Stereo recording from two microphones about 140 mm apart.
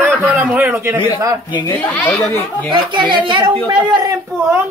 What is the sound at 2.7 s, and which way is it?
A man's voice, 35° right (ahead or behind).